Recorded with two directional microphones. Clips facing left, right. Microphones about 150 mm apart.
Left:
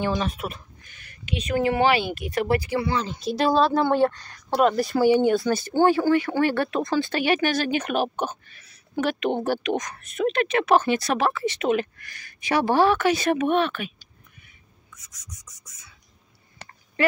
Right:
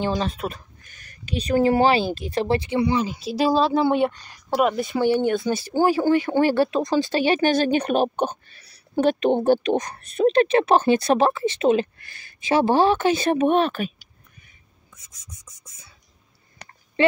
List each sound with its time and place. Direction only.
0.0 s speech: 30° right (ahead or behind)
3.2 s speech: 5° right (ahead or behind); by 13.9 s 35° right (ahead or behind)
14.9 s speech: 25° right (ahead or behind)